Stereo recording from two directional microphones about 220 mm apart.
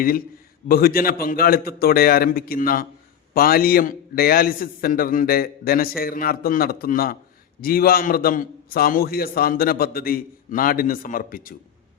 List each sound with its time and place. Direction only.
0.7 s a man's voice: 40° left (ahead or behind)